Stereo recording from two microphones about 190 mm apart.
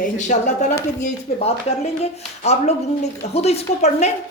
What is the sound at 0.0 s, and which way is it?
A woman's voice, 40° left (ahead or behind).